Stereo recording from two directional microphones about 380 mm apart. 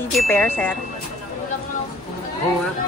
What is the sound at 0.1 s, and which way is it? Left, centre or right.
Speech, centre.